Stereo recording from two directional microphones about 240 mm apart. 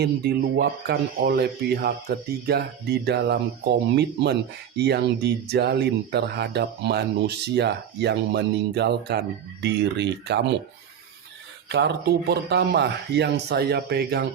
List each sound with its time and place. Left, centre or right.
0.0 s speech: right
12.3 s speech: right